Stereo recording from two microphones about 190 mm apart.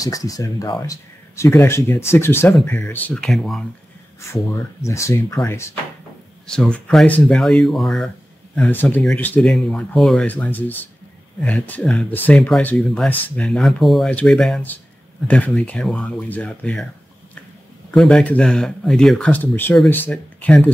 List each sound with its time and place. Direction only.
0.0 s speech: 20° left (ahead or behind); by 3.6 s centre (ahead or behind)
4.2 s speech: 15° left (ahead or behind)
17.9 s speech: 5° left (ahead or behind)